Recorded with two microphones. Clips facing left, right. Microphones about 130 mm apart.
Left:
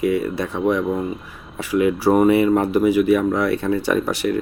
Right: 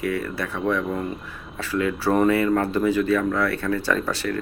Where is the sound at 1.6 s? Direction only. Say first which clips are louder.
Left 6 dB; 15° left (ahead or behind).